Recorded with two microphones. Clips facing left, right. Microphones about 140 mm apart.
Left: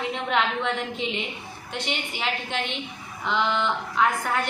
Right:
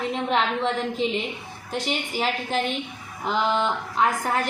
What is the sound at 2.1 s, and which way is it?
A woman's voice, 40° right (ahead or behind).